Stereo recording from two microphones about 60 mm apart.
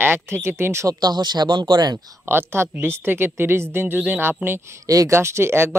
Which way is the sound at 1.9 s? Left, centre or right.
Right.